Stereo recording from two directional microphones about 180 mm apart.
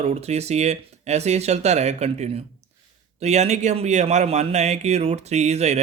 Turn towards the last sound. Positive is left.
turn(degrees=-40)  # may be behind; listen again after turning